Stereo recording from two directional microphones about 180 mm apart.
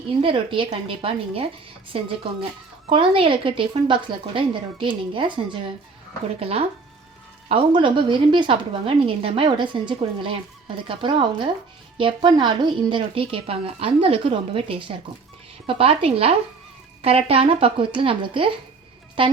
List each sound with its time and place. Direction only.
0.2 s a woman's voice: 30° right (ahead or behind)
6.4 s a woman's voice: 35° right (ahead or behind)